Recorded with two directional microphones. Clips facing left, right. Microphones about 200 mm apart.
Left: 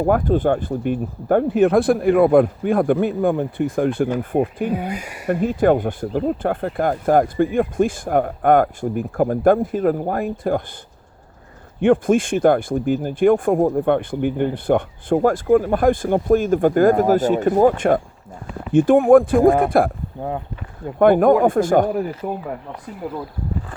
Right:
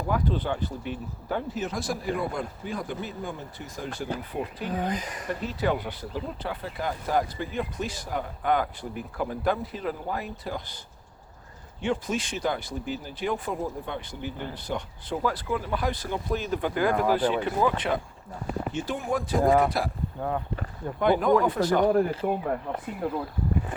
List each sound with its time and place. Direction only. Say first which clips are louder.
0.0 s speech: left 11 dB; 50° left (ahead or behind)
4.6 s speech: left 6 dB; 10° left (ahead or behind)
5.3 s speech: left 12 dB; 50° left (ahead or behind)
11.8 s speech: left 13 dB; 55° left (ahead or behind)
21.0 s speech: left 9 dB; 55° left (ahead or behind)